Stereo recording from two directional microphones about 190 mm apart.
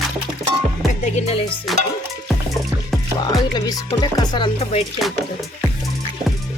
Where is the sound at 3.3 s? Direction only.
20° left (ahead or behind).